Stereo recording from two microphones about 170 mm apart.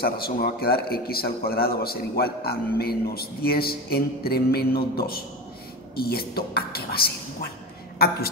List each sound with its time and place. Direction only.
0.0 s a man's voice: 65° left (ahead or behind)